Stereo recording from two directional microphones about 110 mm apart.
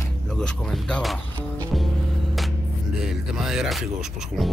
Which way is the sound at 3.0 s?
5° right (ahead or behind).